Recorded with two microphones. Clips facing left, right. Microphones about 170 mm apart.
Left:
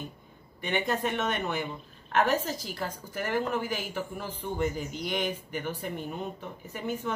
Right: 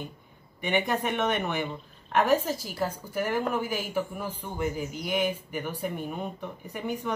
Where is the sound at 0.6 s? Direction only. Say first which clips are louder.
Right 2 dB; 15° right (ahead or behind).